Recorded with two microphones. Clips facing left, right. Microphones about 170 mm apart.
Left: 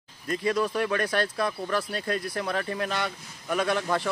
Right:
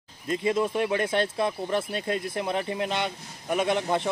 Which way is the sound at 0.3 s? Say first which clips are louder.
Right 1 dB; 20° right (ahead or behind).